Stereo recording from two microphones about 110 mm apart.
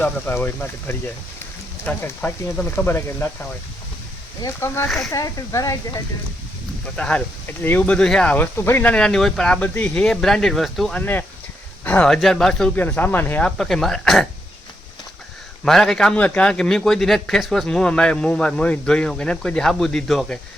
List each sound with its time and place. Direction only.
0.0 s a man's voice: 20° left (ahead or behind)
4.4 s speech: 25° left (ahead or behind)
4.9 s speech: centre (ahead or behind)
5.1 s speech: 30° left (ahead or behind)
6.9 s a man's voice: 10° left (ahead or behind)
8.5 s a man's voice: 20° left (ahead or behind); by 11.0 s centre (ahead or behind)
11.0 s a man's voice: 15° left (ahead or behind)
12.9 s a man's voice: 15° left (ahead or behind)
13.6 s speech: 5° left (ahead or behind)
15.6 s a man's voice: 5° left (ahead or behind)